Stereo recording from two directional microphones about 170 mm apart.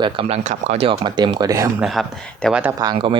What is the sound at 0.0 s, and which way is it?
Speech, 35° right (ahead or behind).